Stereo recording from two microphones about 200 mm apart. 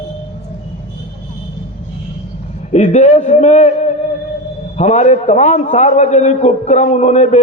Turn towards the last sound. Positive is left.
turn(degrees=35)  # may be behind; listen again after turning